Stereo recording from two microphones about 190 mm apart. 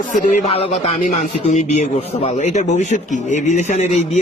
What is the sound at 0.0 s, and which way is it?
Speech, 40° left (ahead or behind).